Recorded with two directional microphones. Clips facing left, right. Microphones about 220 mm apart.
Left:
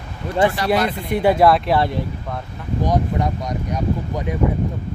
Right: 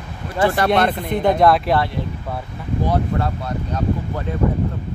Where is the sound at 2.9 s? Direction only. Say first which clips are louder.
Left 1 dB; 15° left (ahead or behind).